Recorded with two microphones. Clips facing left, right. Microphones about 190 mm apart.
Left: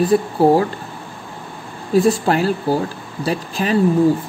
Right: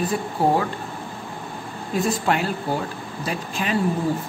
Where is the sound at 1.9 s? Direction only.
35° left (ahead or behind).